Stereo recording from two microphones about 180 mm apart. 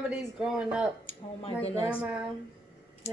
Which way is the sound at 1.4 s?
35° left (ahead or behind).